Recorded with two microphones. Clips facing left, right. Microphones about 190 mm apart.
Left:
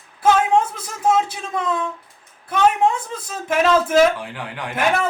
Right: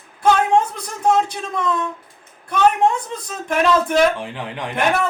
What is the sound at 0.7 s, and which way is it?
Speech, 5° left (ahead or behind).